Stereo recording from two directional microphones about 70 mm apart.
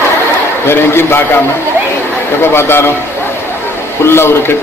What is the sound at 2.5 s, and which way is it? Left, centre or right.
Speech, left.